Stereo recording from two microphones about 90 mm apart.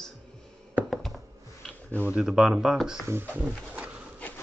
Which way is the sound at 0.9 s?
5° left (ahead or behind).